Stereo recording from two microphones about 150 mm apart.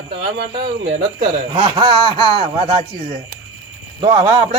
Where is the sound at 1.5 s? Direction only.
30° right (ahead or behind).